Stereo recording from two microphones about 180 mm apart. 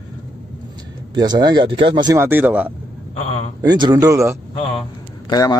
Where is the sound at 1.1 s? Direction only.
25° right (ahead or behind).